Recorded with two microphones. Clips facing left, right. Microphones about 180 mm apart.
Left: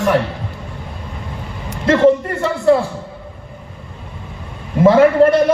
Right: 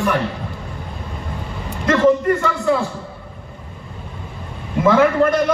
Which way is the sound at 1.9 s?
30° left (ahead or behind).